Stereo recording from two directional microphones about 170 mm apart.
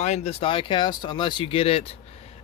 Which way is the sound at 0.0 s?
40° left (ahead or behind).